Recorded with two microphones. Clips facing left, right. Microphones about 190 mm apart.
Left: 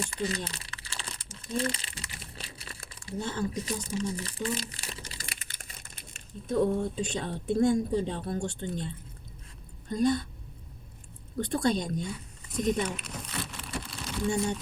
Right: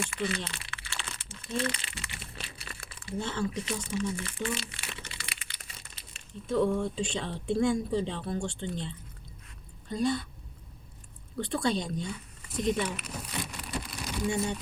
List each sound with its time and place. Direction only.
0.0 s crumpling: 35° left (ahead or behind)
3.2 s speech: 40° left (ahead or behind)
9.9 s a woman's voice: 45° left (ahead or behind)
11.3 s a woman's voice: 45° left (ahead or behind)
13.2 s a sound: 15° right (ahead or behind)